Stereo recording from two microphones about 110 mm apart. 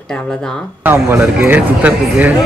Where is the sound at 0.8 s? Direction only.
20° right (ahead or behind).